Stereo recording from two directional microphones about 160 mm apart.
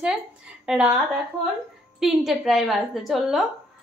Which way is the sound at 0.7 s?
5° right (ahead or behind).